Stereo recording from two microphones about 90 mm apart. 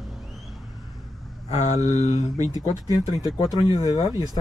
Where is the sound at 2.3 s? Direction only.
45° right (ahead or behind).